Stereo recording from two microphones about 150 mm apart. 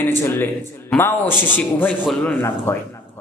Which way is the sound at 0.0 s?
15° left (ahead or behind).